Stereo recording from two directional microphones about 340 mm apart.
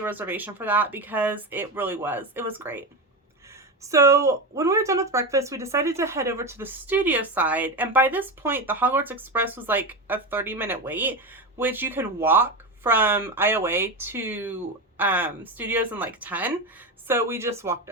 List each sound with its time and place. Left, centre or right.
0.0 s a woman's voice: centre
3.8 s a woman's voice: centre